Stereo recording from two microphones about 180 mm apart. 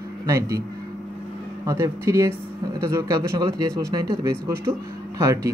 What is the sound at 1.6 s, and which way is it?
Speech, 15° right (ahead or behind).